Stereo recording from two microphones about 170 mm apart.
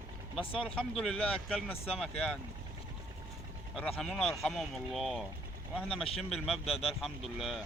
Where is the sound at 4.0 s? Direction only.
5° left (ahead or behind).